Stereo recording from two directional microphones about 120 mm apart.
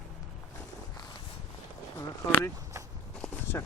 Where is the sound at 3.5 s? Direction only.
20° left (ahead or behind).